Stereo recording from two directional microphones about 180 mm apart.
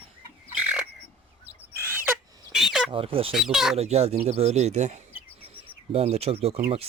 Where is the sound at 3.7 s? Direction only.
35° right (ahead or behind).